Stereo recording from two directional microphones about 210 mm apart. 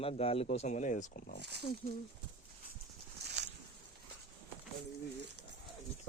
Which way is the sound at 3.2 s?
55° right (ahead or behind).